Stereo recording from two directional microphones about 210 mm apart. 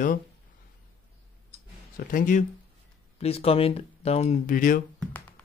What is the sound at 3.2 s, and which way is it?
Speech, 30° left (ahead or behind).